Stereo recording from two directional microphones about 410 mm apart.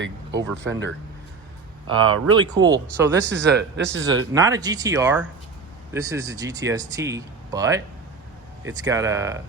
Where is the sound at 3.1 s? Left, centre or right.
Right.